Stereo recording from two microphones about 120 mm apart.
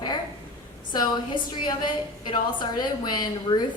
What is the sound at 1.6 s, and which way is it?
A woman's voice, 40° left (ahead or behind).